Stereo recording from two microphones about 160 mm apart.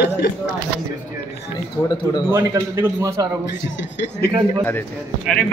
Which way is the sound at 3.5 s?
90° left.